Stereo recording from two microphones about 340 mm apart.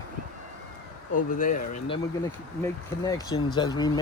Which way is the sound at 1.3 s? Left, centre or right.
Left.